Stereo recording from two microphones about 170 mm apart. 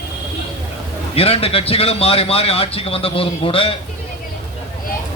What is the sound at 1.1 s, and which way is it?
A man's voice, 35° left (ahead or behind).